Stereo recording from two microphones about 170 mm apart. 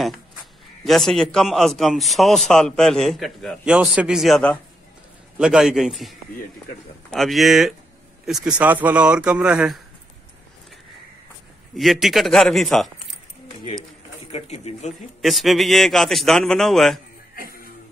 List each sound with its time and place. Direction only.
0.0 s a man's voice: centre (ahead or behind)
11.7 s a man's voice: centre (ahead or behind)
14.3 s speech: 40° left (ahead or behind)
15.2 s a man's voice: centre (ahead or behind)
17.4 s music: 60° left (ahead or behind)